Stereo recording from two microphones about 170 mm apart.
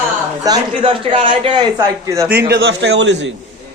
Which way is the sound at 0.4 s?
25° right (ahead or behind).